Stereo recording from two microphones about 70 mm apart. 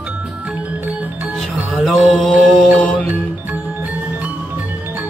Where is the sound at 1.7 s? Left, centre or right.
Centre.